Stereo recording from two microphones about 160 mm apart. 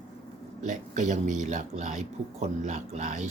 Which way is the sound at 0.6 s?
50° right (ahead or behind).